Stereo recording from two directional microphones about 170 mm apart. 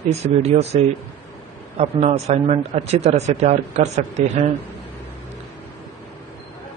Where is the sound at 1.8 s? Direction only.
40° right (ahead or behind).